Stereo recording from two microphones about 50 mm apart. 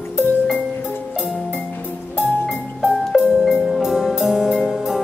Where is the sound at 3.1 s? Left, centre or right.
Centre.